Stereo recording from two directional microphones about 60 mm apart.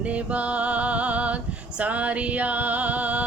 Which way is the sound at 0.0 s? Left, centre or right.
Right.